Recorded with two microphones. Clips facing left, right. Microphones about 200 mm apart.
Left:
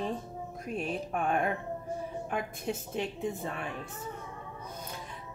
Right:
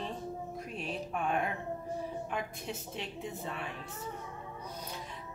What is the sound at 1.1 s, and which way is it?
Speech, 50° left (ahead or behind).